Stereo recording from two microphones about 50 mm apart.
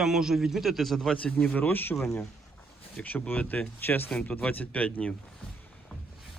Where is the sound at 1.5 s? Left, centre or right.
Left.